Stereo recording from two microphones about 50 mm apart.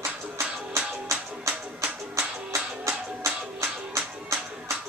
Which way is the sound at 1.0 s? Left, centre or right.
Right.